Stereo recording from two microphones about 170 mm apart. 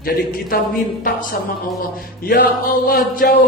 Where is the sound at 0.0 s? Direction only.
60° left (ahead or behind).